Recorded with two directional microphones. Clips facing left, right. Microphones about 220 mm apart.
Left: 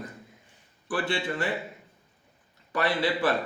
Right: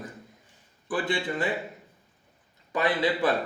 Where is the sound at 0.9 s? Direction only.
20° right (ahead or behind).